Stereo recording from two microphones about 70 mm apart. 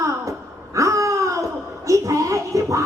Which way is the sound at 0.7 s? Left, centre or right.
Right.